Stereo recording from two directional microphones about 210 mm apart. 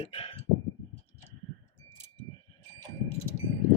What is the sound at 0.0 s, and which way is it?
Speech, 30° left (ahead or behind).